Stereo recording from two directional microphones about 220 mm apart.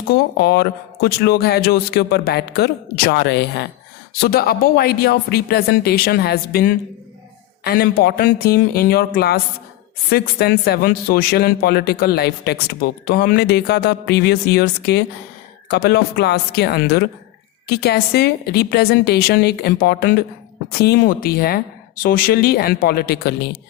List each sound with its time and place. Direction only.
0.1 s a man's voice: 45° left (ahead or behind)